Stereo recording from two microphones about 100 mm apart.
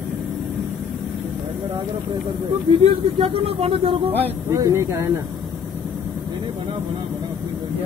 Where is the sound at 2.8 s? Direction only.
85° right.